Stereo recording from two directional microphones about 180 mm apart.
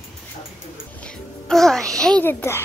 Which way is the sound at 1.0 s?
Centre (ahead or behind).